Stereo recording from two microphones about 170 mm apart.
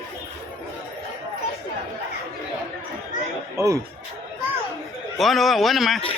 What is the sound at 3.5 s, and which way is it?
Music, 20° right (ahead or behind).